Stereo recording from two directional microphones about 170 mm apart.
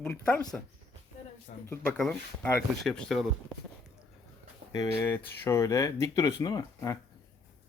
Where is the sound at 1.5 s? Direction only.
50° left (ahead or behind).